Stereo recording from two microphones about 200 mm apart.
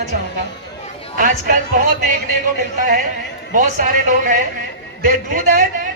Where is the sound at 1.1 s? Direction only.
40° right (ahead or behind).